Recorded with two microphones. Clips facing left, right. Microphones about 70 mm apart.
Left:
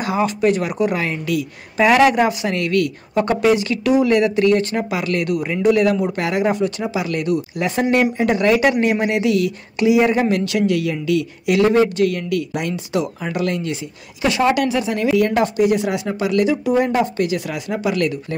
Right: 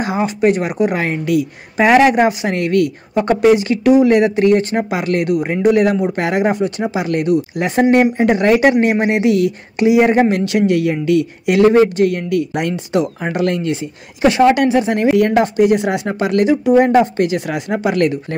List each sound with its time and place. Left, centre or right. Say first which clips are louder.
0.0 s speech: right 2 dB; right
12.5 s speech: right 4 dB; right